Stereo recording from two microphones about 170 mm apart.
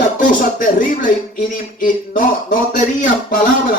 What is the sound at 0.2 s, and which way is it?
Speech, 50° left (ahead or behind).